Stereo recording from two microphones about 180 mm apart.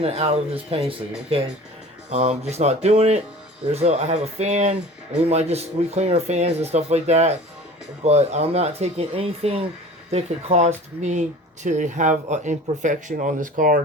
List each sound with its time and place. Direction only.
0.0 s speech: 35° right (ahead or behind)
2.0 s speech: 35° right (ahead or behind)